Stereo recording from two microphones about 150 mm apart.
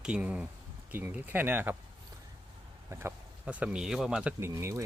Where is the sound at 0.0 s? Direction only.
10° right (ahead or behind).